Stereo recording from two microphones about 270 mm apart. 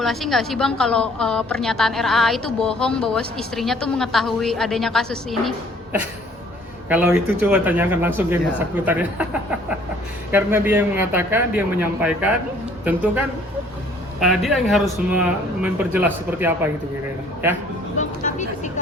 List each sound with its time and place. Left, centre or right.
0.0 s a woman's voice: centre
17.9 s speech: left